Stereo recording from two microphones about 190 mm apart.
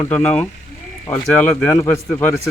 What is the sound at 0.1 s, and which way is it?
A man's voice, 5° left (ahead or behind).